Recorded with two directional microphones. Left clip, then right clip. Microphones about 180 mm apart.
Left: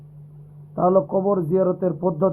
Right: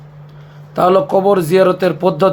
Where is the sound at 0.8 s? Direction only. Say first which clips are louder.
Right 7 dB; 40° right (ahead or behind).